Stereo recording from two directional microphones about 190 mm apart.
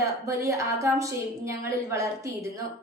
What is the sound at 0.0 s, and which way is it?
A woman's voice, 15° right (ahead or behind).